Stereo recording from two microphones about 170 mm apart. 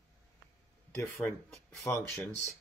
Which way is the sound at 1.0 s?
15° left (ahead or behind).